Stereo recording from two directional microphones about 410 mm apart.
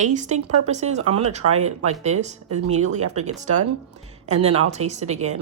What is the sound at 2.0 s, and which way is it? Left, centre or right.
Speech, centre.